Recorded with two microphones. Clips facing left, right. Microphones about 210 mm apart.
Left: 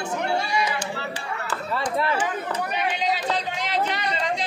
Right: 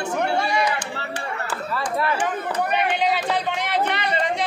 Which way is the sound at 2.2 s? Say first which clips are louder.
Right 3 dB; 55° right (ahead or behind).